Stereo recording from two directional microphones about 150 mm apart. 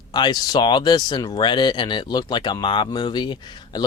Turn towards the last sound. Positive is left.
turn(degrees=30)  # may be behind; listen again after turning